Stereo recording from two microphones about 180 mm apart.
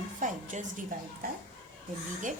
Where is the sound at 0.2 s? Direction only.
45° right (ahead or behind).